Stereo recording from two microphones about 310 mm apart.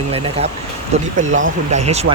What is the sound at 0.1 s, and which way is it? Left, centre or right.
Speech, centre.